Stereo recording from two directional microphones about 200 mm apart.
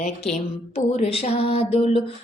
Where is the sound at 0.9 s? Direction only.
30° left (ahead or behind).